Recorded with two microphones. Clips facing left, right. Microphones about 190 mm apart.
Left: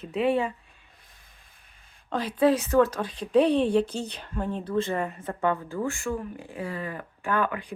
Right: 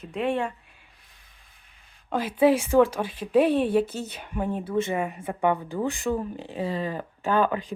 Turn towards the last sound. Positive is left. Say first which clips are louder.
# right 4 dB
turn(degrees=-25)  # may be behind; listen again after turning